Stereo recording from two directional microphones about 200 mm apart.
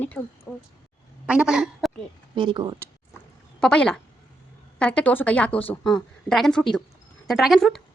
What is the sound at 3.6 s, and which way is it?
A woman's voice, 5° left (ahead or behind).